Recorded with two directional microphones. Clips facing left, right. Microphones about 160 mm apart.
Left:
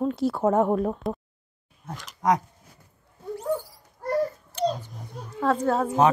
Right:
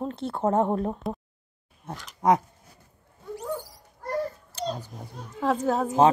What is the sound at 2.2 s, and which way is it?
Speech, 30° right (ahead or behind).